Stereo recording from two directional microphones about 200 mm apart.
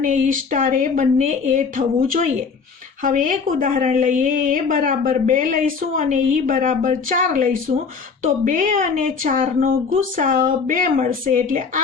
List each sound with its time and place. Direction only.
0.0 s a woman's voice: 40° right (ahead or behind)